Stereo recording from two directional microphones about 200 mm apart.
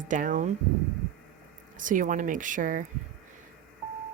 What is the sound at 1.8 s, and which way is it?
Speech, 40° right (ahead or behind).